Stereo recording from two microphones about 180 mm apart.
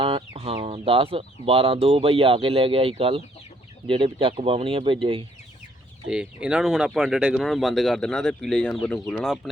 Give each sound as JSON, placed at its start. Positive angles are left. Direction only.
{"t": 0.0, "sound": "speech", "side_deg": -30}
{"t": 6.1, "sound": "speech", "side_deg": -5}